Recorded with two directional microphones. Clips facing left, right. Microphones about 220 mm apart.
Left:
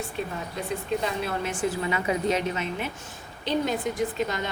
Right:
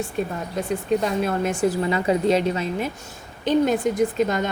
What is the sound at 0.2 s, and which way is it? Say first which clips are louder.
A woman's voice: right 6 dB; 45° right (ahead or behind).